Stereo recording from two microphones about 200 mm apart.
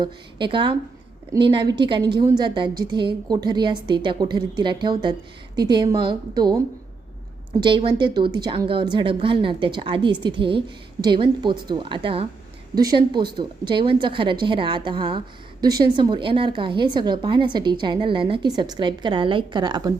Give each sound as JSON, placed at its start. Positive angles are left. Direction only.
{"t": 0.0, "sound": "a woman's voice", "side_deg": -25}
{"t": 7.6, "sound": "a woman's voice", "side_deg": -25}